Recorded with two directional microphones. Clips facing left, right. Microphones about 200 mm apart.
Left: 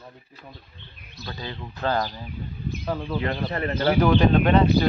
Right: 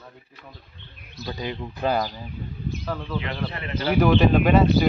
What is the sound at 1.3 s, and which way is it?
Speech, 15° right (ahead or behind).